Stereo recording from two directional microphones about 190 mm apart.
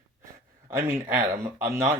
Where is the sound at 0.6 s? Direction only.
10° right (ahead or behind).